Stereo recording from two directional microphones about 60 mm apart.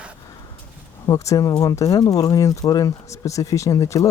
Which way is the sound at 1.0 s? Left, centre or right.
Left.